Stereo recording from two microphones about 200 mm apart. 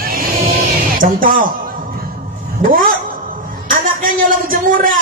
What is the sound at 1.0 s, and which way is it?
Music, 45° right (ahead or behind).